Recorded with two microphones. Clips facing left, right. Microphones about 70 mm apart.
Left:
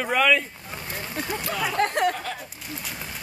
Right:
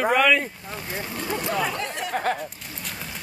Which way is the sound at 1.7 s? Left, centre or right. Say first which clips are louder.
Left 8 dB; left.